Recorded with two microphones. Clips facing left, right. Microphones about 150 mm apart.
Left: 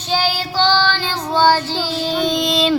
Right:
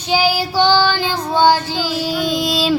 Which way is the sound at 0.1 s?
10° right (ahead or behind).